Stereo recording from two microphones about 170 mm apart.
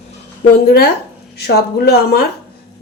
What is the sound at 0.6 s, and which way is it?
Speech, 65° left (ahead or behind).